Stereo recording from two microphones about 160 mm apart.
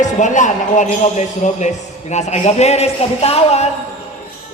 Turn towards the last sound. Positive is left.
turn(degrees=40)  # may be behind; listen again after turning